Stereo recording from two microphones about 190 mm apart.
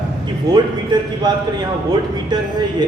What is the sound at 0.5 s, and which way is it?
Speech, 20° right (ahead or behind).